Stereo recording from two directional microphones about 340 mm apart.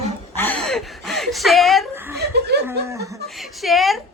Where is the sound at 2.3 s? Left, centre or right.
Right.